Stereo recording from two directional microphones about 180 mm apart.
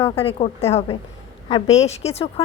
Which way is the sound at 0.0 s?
30° left (ahead or behind).